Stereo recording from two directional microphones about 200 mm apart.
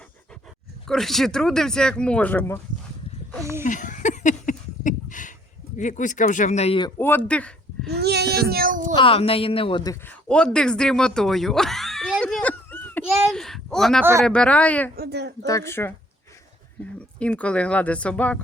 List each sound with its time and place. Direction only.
0.9 s speech: centre (ahead or behind)
3.6 s a sound: 40° left (ahead or behind)
5.7 s speech: 40° left (ahead or behind)
7.0 s speech: 10° left (ahead or behind)
7.9 s child singing: 55° right (ahead or behind)
9.0 s a man's voice: 25° left (ahead or behind); by 13.1 s 10° left (ahead or behind)
13.1 s a sound: centre (ahead or behind)
14.0 s speech: 15° right (ahead or behind)
14.3 s speech: 5° left (ahead or behind)
14.9 s a sound: 55° right (ahead or behind)
15.4 s speech: 15° left (ahead or behind)